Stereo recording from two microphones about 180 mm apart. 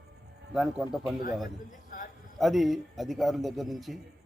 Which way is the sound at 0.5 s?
5° right (ahead or behind).